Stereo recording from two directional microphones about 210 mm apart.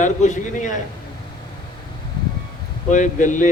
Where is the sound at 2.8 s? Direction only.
35° left (ahead or behind).